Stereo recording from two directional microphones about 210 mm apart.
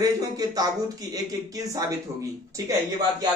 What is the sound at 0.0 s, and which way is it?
Speech, 15° right (ahead or behind).